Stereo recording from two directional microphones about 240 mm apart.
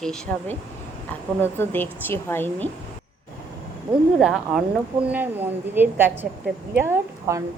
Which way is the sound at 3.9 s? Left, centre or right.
Centre.